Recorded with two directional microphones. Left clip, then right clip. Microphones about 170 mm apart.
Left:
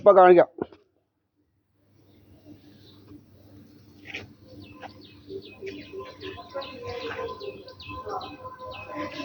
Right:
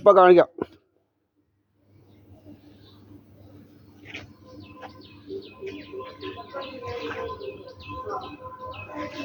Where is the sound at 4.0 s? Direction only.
50° left (ahead or behind).